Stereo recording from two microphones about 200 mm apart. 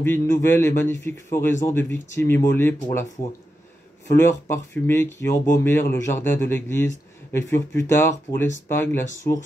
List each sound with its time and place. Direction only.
0.0 s a man's voice: 10° left (ahead or behind)
4.2 s a man's voice: 10° left (ahead or behind)